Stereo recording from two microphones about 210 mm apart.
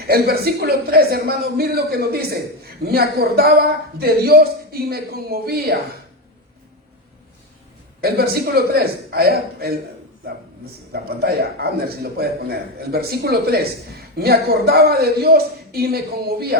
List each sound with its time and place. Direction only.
0.0 s a man's voice: 45° right (ahead or behind)
8.0 s a man's voice: 45° right (ahead or behind)
10.9 s a man's voice: 50° right (ahead or behind)